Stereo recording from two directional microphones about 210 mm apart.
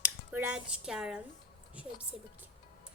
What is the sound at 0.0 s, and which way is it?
A woman's voice, 5° right (ahead or behind).